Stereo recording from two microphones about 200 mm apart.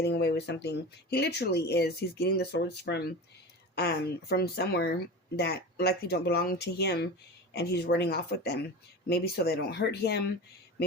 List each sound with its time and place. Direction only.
0.0 s speech: 55° left (ahead or behind)